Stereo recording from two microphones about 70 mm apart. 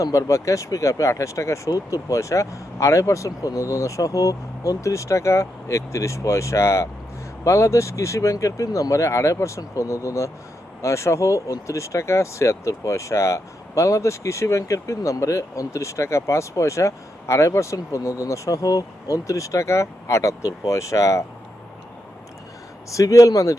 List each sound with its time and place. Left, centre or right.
0.0 s speech: left
22.9 s speech: left